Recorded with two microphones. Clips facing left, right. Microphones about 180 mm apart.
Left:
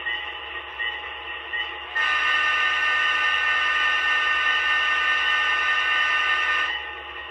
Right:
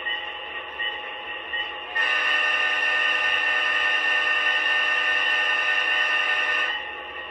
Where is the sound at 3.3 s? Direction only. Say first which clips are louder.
Right 1 dB; 25° right (ahead or behind).